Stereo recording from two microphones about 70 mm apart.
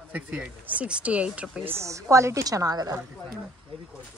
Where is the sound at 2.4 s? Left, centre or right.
Right.